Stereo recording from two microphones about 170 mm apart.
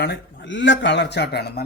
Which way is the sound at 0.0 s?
85° left.